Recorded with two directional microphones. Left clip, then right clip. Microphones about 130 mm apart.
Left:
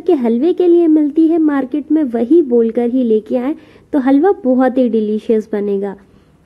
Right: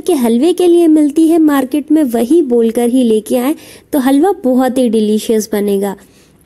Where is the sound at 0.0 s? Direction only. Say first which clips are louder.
Right 2 dB; 40° right (ahead or behind).